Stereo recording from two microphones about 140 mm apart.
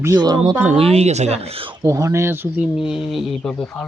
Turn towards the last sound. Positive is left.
turn(degrees=0)  # may be behind; listen again after turning